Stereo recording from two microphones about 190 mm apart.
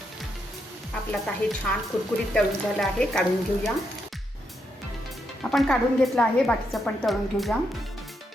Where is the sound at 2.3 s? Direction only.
5° left (ahead or behind).